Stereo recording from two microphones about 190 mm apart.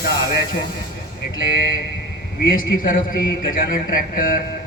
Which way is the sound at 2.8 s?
50° left (ahead or behind).